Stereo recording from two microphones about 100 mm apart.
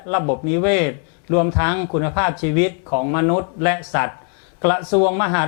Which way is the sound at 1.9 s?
10° left (ahead or behind).